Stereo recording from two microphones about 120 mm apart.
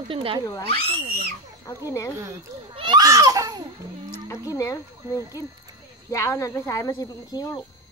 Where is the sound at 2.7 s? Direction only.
40° right (ahead or behind).